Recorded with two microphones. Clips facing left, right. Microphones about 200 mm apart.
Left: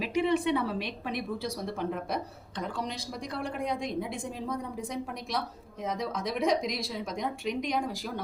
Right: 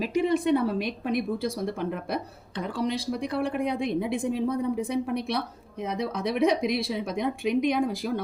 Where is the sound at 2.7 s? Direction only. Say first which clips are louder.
Right 8 dB; 60° right (ahead or behind).